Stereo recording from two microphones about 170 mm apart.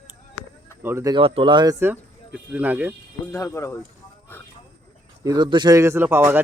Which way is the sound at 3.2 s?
15° left (ahead or behind).